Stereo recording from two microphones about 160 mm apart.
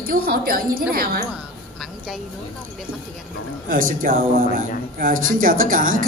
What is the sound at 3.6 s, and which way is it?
A man's voice, 60° right (ahead or behind).